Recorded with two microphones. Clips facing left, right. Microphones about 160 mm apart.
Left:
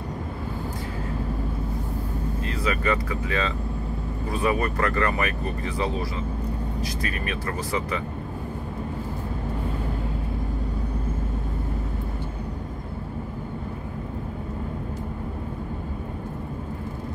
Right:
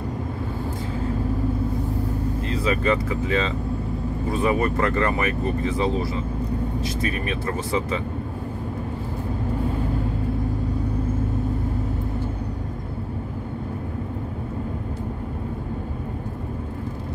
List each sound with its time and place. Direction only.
2.6 s speech: 25° right (ahead or behind)
7.0 s speech: 25° right (ahead or behind)